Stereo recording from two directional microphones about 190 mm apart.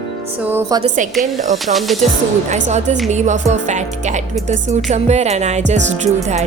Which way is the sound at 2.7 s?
40° right (ahead or behind).